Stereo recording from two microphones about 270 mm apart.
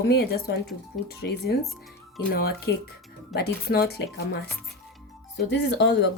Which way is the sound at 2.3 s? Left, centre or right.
Left.